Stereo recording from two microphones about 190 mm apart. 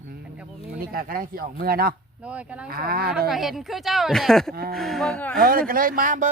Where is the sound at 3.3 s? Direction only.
Centre (ahead or behind).